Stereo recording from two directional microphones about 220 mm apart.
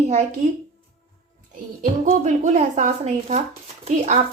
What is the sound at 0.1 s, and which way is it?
Speech, 35° right (ahead or behind).